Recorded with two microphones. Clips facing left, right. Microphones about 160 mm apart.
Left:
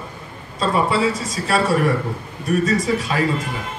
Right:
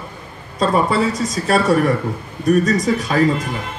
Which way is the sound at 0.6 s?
40° right (ahead or behind).